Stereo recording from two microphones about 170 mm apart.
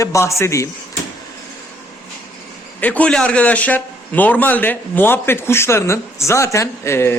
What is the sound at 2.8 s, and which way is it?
A man's voice, 10° left (ahead or behind).